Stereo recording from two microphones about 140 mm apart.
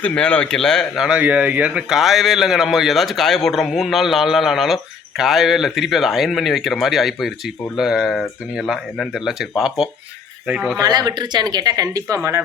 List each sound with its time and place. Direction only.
0.0 s speech: 10° left (ahead or behind)
10.8 s speech: 30° right (ahead or behind)